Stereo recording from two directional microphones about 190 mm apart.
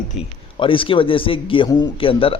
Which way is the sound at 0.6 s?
25° left (ahead or behind).